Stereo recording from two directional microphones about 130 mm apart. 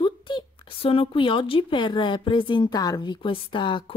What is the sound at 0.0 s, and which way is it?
Speech, 40° left (ahead or behind).